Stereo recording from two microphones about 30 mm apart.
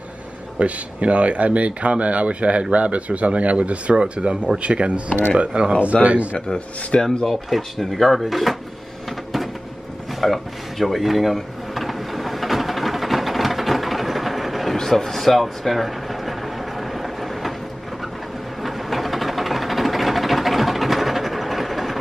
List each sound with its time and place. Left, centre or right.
0.6 s speech: right
3.9 s speech: right
5.9 s speech: left
7.2 s speech: centre
10.2 s drawer open or close: centre
14.8 s speech: centre
16.9 s vehicle: centre
18.6 s a sound: centre